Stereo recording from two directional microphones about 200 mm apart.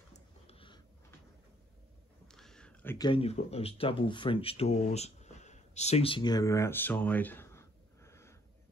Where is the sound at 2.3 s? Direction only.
5° left (ahead or behind).